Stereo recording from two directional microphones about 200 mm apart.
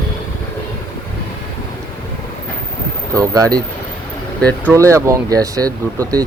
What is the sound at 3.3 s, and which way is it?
Speech, 20° right (ahead or behind).